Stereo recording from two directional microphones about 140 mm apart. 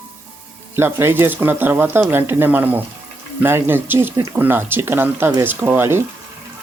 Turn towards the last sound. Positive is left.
turn(degrees=-15)  # may be behind; listen again after turning